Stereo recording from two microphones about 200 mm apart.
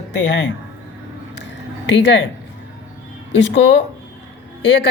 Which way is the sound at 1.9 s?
60° left (ahead or behind).